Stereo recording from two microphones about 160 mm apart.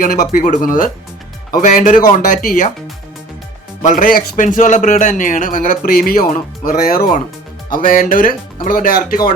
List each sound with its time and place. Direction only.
0.3 s a man's voice: 60° left (ahead or behind)
3.8 s a man's voice: 60° left (ahead or behind)